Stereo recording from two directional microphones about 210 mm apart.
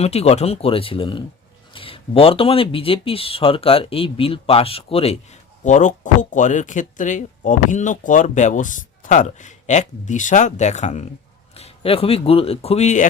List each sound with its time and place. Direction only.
0.0 s speech: 30° left (ahead or behind)